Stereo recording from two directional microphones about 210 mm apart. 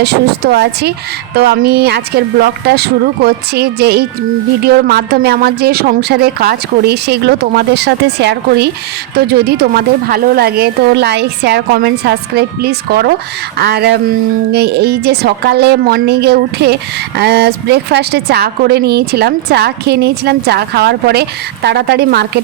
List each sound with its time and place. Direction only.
0.0 s a woman's voice: 50° right (ahead or behind)